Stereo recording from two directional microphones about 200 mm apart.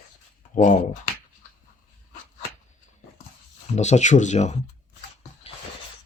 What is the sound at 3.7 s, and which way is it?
Speech, 35° left (ahead or behind).